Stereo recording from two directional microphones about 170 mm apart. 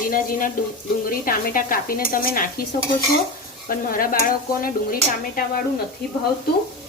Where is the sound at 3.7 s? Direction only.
55° left (ahead or behind).